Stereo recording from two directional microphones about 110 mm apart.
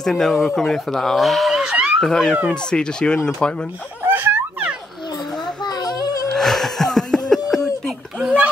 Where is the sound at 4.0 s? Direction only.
20° right (ahead or behind).